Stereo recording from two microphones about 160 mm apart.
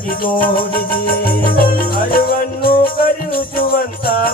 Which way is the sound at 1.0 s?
65° left (ahead or behind).